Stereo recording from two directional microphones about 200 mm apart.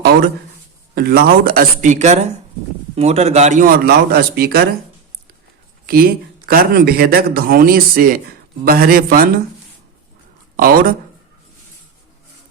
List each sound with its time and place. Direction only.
0.9 s a man's voice: 50° right (ahead or behind)
5.8 s speech: 50° right (ahead or behind)
10.6 s speech: 45° right (ahead or behind)